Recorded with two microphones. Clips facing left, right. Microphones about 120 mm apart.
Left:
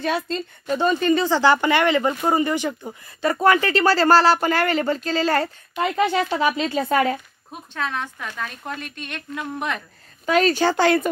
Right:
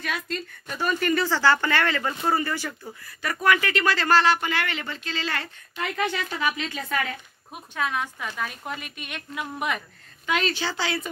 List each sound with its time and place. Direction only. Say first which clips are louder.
0.0 s speech: left 7 dB; 30° left (ahead or behind)
7.5 s speech: left 1 dB; 10° right (ahead or behind)
9.8 s a woman's voice: left 2 dB; 40° left (ahead or behind)